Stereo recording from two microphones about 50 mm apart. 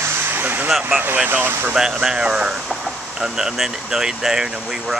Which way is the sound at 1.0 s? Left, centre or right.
Right.